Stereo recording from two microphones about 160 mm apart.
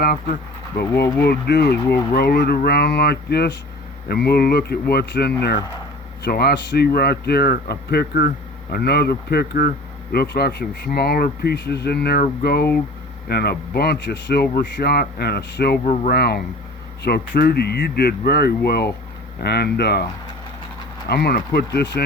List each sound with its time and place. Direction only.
0.0 s speech: 70° left (ahead or behind)
1.2 s speech: 85° left
4.1 s speech: 75° left (ahead or behind)
6.2 s speech: 80° left
14.5 s speech: 70° left (ahead or behind); by 15.8 s 90° left
15.8 s speech: 65° left (ahead or behind)
19.4 s speech: 90° left
21.1 s speech: 90° left